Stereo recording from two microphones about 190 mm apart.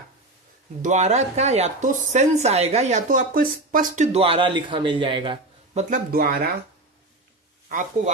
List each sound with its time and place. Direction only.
0.8 s speech: 40° right (ahead or behind)
5.9 s speech: 50° right (ahead or behind)
7.7 s speech: 45° right (ahead or behind)